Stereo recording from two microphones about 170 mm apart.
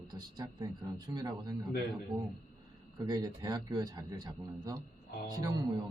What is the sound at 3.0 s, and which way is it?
A man's voice, 25° right (ahead or behind).